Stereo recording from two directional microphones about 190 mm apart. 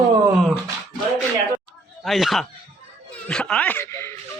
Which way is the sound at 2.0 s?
Centre (ahead or behind).